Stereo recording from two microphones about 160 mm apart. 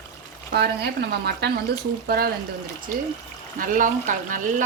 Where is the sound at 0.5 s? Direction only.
90° right.